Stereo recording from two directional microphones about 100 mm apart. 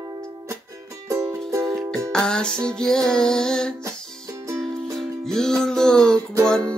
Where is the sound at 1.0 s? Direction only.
35° right (ahead or behind).